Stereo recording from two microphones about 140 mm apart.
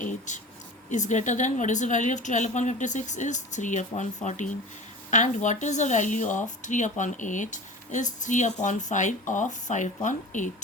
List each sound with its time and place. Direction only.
0.0 s speech: 60° left (ahead or behind)